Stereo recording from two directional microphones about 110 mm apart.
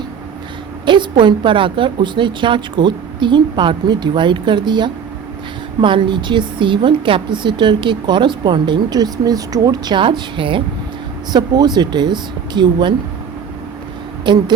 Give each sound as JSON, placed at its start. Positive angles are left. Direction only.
{"t": 0.9, "sound": "a woman's voice", "side_deg": -45}
{"t": 11.3, "sound": "speech", "side_deg": -40}
{"t": 14.3, "sound": "a woman's voice", "side_deg": -45}